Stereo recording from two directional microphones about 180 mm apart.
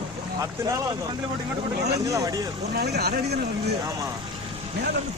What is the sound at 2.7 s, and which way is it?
Speech, 60° right (ahead or behind).